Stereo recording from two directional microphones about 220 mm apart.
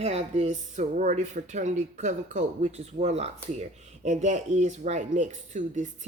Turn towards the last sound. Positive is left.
turn(degrees=-35)  # may be behind; listen again after turning